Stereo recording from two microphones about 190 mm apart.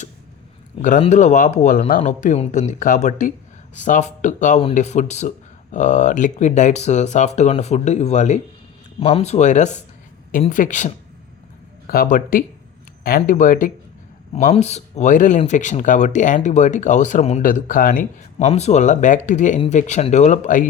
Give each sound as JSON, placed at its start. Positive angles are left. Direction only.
{"t": 0.8, "sound": "speech", "side_deg": 40}
{"t": 14.3, "sound": "speech", "side_deg": 35}
{"t": 18.4, "sound": "speech", "side_deg": 35}